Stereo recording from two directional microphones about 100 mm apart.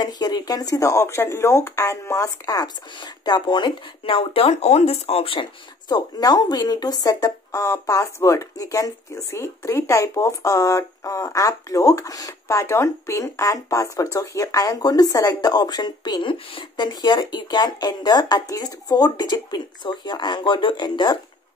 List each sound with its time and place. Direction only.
0.0 s speech: 45° left (ahead or behind); by 5.5 s 70° left (ahead or behind)
5.9 s speech: 40° left (ahead or behind)